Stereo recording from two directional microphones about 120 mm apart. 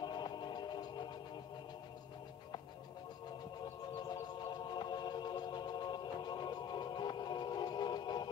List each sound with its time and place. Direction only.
0.0 s music: 40° left (ahead or behind)
4.1 s music: 40° left (ahead or behind)